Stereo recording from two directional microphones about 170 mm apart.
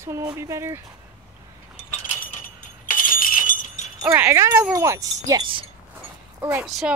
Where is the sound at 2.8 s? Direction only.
55° left (ahead or behind).